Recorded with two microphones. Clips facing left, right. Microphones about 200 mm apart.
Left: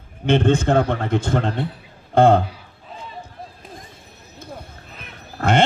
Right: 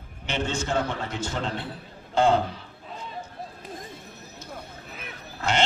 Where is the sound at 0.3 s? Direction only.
55° left (ahead or behind).